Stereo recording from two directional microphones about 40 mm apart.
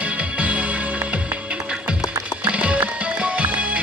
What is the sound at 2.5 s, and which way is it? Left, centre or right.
Music, right.